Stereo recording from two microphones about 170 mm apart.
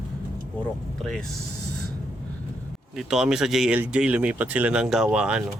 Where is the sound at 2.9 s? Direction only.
Centre (ahead or behind).